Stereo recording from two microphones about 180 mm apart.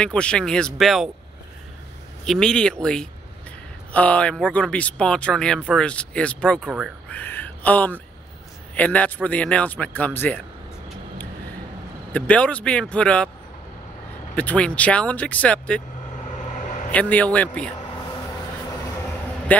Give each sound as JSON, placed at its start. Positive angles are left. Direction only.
{"t": 0.0, "sound": "speech", "side_deg": 5}
{"t": 2.2, "sound": "speech", "side_deg": 5}
{"t": 7.1, "sound": "a sound", "side_deg": 10}
{"t": 8.7, "sound": "speech", "side_deg": 10}
{"t": 12.1, "sound": "speech", "side_deg": 5}
{"t": 14.3, "sound": "speech", "side_deg": 10}
{"t": 16.5, "sound": "vehicle", "side_deg": 45}
{"t": 16.9, "sound": "speech", "side_deg": 5}